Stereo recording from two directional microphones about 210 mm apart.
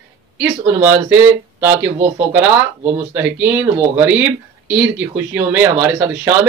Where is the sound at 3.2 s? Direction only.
10° right (ahead or behind).